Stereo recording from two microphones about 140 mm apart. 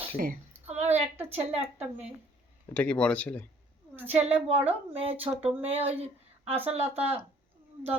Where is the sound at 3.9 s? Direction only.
15° right (ahead or behind).